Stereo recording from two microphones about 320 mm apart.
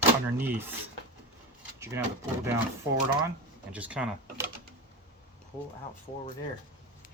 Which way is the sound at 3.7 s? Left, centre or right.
Centre.